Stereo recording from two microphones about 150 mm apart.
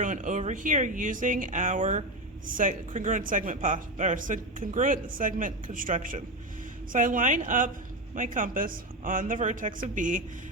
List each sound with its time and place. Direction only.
0.0 s speech: 60° right (ahead or behind)